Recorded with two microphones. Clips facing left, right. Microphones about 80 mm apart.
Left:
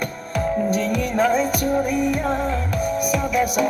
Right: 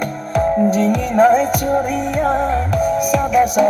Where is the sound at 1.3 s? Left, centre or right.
Right.